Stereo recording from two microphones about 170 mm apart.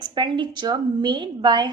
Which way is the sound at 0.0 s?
25° right (ahead or behind).